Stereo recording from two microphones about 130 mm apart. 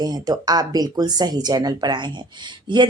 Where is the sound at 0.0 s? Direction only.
30° right (ahead or behind).